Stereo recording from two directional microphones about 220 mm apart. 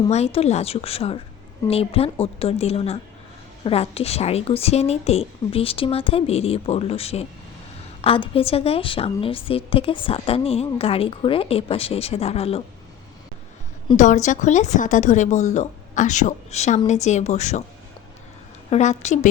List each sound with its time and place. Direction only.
0.1 s a woman's voice: 30° left (ahead or behind)
13.9 s a woman's voice: 35° left (ahead or behind)
18.7 s a woman's voice: 30° left (ahead or behind)